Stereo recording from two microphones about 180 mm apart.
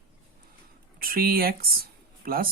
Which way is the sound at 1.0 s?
55° right (ahead or behind).